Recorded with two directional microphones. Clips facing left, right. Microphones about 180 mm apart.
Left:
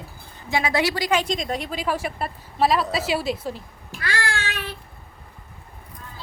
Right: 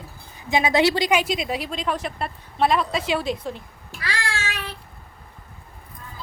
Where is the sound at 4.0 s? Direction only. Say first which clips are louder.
Left 2 dB; 55° left (ahead or behind).